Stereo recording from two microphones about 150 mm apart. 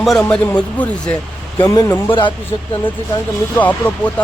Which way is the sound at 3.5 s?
10° left (ahead or behind).